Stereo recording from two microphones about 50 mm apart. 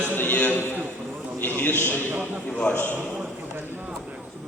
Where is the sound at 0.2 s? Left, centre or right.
Left.